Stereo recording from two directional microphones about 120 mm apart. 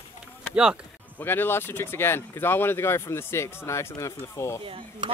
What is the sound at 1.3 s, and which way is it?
Speech, 20° left (ahead or behind).